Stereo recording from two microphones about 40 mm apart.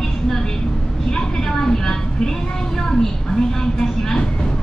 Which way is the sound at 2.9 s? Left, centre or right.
Centre.